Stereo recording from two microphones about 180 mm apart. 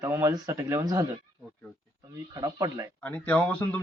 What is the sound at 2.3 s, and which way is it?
Speech, 20° right (ahead or behind).